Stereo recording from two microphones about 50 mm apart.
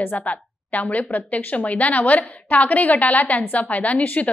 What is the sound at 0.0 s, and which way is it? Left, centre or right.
A woman's voice, left.